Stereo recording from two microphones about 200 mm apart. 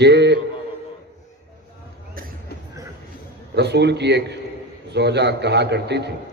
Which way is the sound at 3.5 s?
55° right (ahead or behind).